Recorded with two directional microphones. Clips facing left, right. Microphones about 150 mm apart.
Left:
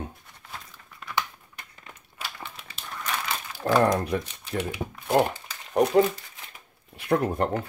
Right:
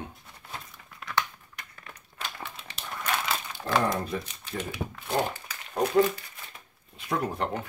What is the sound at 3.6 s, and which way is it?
Speech, 50° left (ahead or behind).